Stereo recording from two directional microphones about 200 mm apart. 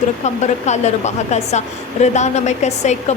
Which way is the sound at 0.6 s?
35° left (ahead or behind).